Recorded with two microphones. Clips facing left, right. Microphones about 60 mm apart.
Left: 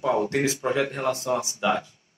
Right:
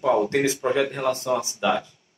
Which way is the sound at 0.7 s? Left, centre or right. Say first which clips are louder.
Right 2 dB; centre.